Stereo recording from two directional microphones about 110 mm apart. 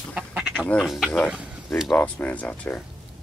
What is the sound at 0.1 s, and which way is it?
Duck, 10° right (ahead or behind).